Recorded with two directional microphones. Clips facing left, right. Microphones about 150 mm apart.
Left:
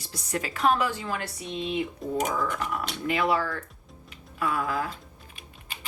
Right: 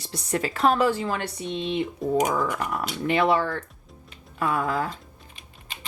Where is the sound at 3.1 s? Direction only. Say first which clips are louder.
Right 4 dB; 30° right (ahead or behind).